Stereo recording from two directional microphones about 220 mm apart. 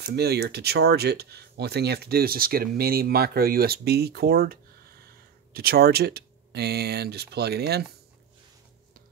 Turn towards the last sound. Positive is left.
turn(degrees=-45)  # may be behind; listen again after turning